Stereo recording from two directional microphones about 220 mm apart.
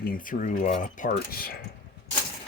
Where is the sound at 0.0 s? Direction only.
40° left (ahead or behind).